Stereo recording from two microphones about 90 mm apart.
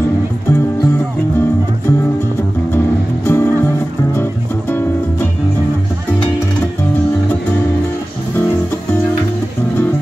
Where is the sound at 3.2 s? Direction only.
25° left (ahead or behind).